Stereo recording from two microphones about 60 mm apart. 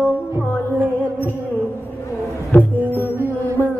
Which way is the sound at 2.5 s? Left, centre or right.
Left.